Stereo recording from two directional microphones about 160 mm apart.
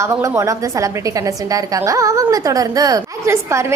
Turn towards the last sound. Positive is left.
turn(degrees=-15)  # may be behind; listen again after turning